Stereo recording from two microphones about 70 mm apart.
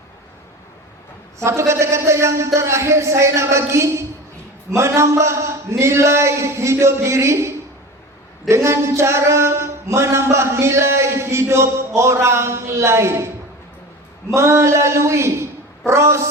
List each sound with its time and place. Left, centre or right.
1.5 s speech: right
8.4 s a sound: right
14.3 s speech: right